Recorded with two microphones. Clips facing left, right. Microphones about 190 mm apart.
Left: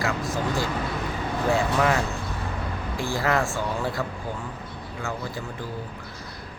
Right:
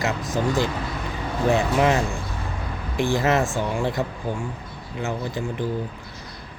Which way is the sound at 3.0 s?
20° right (ahead or behind).